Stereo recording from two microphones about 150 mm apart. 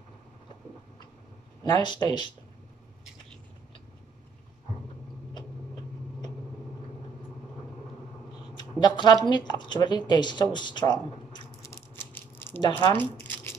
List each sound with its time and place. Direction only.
1.6 s a woman's voice: 30° left (ahead or behind)
8.5 s a woman's voice: 30° left (ahead or behind)
11.6 s a sound: 15° left (ahead or behind)
12.9 s crumpling: 15° left (ahead or behind)